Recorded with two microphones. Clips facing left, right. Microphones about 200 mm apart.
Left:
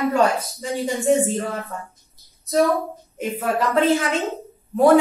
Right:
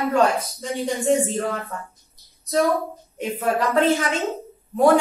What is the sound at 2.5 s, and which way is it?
A woman's voice, centre (ahead or behind).